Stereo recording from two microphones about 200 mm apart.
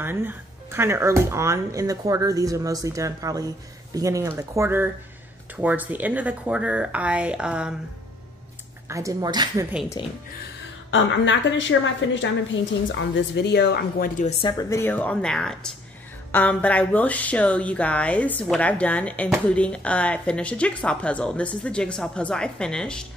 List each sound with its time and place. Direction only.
0.0 s speech: 10° right (ahead or behind)
8.8 s speech: 15° right (ahead or behind)
10.9 s a woman's voice: 70° left (ahead or behind); by 14.3 s 45° left (ahead or behind)
14.4 s a woman's voice: 15° left (ahead or behind)